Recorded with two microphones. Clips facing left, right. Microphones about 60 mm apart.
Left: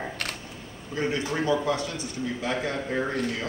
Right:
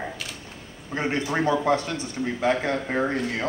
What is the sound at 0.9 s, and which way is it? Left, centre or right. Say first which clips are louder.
A man's voice: right 2 dB; right.